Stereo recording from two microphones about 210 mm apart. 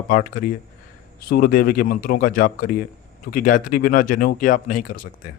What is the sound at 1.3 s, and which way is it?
Speech, 45° left (ahead or behind).